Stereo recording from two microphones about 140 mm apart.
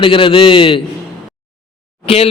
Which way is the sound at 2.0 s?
45° left (ahead or behind).